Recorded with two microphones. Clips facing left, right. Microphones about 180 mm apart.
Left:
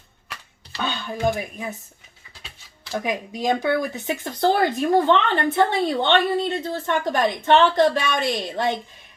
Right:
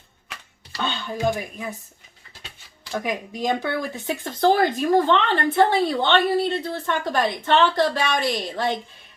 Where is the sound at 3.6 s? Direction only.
20° left (ahead or behind).